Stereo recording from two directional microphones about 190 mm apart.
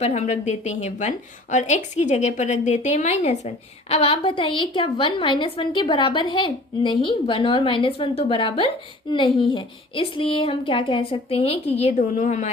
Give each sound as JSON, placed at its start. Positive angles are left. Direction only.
{"t": 0.0, "sound": "a woman's voice", "side_deg": 35}